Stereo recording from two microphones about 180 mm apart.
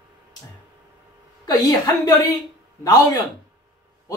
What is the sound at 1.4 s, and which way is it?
Speech, 20° left (ahead or behind).